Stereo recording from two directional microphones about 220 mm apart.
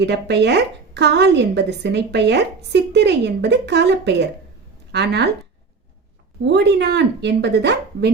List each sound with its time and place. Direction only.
0.0 s a woman's voice: 50° right (ahead or behind)
6.4 s a woman's voice: 50° right (ahead or behind)